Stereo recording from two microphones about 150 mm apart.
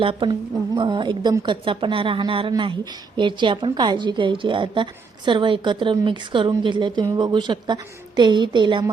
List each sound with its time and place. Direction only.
0.0 s a woman's voice: 35° right (ahead or behind)